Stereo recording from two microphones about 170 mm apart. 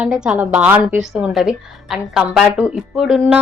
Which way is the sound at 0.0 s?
5° right (ahead or behind).